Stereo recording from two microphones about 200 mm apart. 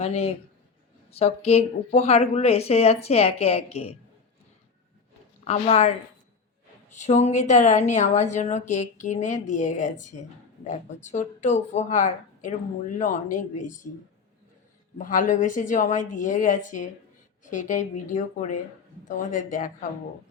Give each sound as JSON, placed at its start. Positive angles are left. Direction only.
{"t": 0.0, "sound": "a woman's voice", "side_deg": 30}
{"t": 5.5, "sound": "a woman's voice", "side_deg": 30}
{"t": 6.9, "sound": "a woman's voice", "side_deg": 35}
{"t": 14.9, "sound": "a woman's voice", "side_deg": 40}